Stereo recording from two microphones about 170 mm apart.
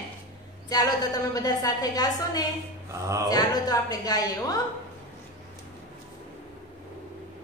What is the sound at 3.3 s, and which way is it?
Speech, 25° left (ahead or behind).